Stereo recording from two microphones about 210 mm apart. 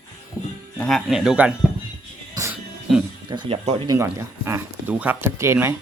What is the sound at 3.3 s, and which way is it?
Speech, 25° right (ahead or behind).